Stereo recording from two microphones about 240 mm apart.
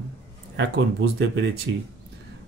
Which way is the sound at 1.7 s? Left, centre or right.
Right.